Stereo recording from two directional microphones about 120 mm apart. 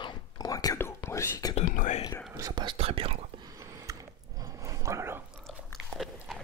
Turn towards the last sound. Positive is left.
turn(degrees=0)  # may be behind; listen again after turning